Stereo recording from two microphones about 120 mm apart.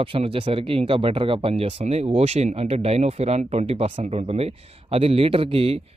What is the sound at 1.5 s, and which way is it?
Speech, 60° right (ahead or behind).